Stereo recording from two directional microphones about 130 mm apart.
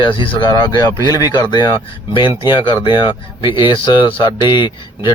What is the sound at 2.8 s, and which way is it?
Speech, 35° left (ahead or behind).